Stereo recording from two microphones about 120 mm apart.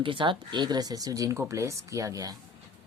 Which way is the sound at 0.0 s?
45° right (ahead or behind).